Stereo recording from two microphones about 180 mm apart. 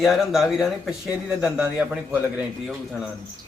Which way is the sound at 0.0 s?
Centre (ahead or behind).